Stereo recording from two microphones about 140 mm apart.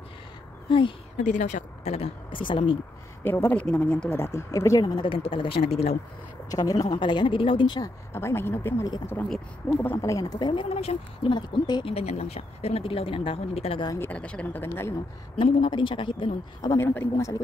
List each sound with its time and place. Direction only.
0.7 s speech: 35° left (ahead or behind)
1.1 s speech: 60° left (ahead or behind); by 2.8 s 35° left (ahead or behind)
3.3 s speech: 15° left (ahead or behind); by 5.9 s 45° left (ahead or behind)
6.5 s speech: 25° left (ahead or behind)
8.1 s speech: 15° left (ahead or behind); by 11.9 s 35° left (ahead or behind)
11.9 s speech: 50° left (ahead or behind)
13.8 s speech: 15° left (ahead or behind)
15.3 s speech: 35° left (ahead or behind)
16.6 s speech: 20° left (ahead or behind)